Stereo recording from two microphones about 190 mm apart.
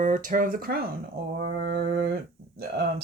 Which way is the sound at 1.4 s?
60° right (ahead or behind).